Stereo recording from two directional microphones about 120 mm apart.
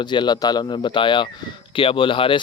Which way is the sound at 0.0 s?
40° left (ahead or behind).